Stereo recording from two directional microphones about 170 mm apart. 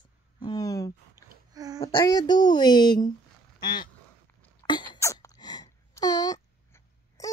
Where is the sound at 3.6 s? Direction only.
25° left (ahead or behind).